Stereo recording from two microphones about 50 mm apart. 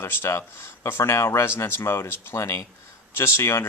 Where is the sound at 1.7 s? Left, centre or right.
Left.